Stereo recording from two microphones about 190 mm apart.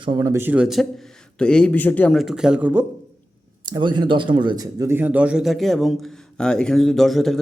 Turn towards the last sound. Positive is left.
turn(degrees=0)  # may be behind; listen again after turning